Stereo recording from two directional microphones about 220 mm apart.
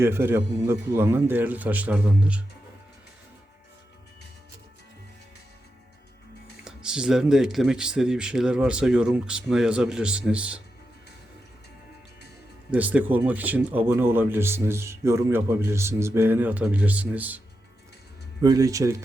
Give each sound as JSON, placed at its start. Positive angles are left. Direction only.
{"t": 0.0, "sound": "speech", "side_deg": -10}
{"t": 6.7, "sound": "speech", "side_deg": -5}
{"t": 12.7, "sound": "speech", "side_deg": -5}
{"t": 18.4, "sound": "speech", "side_deg": -15}